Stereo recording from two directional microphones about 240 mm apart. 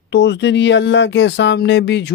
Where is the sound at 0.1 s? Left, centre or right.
Left.